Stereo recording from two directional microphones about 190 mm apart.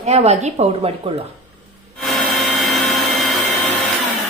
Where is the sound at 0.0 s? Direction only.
35° right (ahead or behind).